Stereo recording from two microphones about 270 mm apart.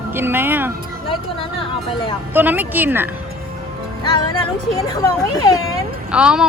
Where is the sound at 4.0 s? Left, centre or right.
Centre.